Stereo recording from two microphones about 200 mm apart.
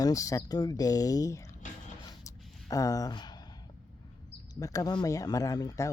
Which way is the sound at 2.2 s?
15° left (ahead or behind).